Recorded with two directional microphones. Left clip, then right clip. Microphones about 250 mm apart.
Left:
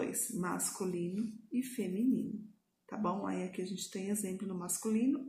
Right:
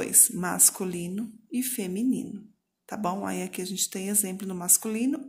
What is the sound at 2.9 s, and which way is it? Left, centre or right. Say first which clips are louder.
A woman's voice: right 7 dB; right.